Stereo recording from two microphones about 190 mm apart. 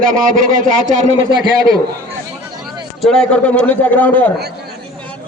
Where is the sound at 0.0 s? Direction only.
45° right (ahead or behind).